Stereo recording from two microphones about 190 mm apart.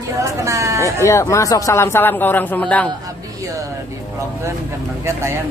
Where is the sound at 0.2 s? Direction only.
15° right (ahead or behind).